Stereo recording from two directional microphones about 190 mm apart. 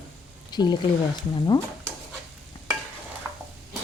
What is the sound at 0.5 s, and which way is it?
Speech, 20° left (ahead or behind).